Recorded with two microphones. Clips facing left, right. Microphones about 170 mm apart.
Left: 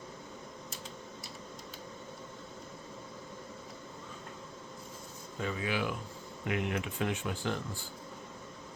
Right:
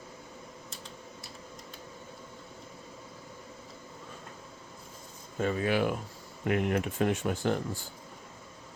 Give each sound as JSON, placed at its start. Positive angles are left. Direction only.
{"t": 5.4, "sound": "speech", "side_deg": -50}